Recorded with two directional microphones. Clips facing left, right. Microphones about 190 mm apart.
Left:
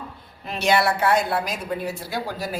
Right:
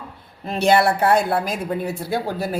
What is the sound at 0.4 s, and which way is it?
Speech, 45° right (ahead or behind).